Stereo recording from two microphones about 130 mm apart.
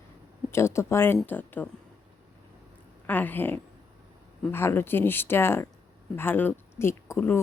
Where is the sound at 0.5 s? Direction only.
20° left (ahead or behind).